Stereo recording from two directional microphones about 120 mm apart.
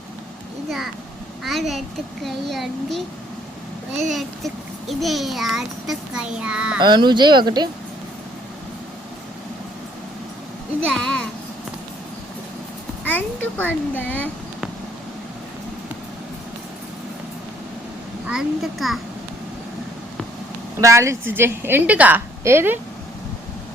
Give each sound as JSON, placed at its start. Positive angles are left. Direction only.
{"t": 1.5, "sound": "a child's voice", "side_deg": 0}
{"t": 4.1, "sound": "a child's voice", "side_deg": 0}
{"t": 6.7, "sound": "speech", "side_deg": -40}
{"t": 10.8, "sound": "a child's voice", "side_deg": 5}
{"t": 13.1, "sound": "a child's voice", "side_deg": 15}
{"t": 18.3, "sound": "a child's voice", "side_deg": -5}
{"t": 20.8, "sound": "a woman's voice", "side_deg": -25}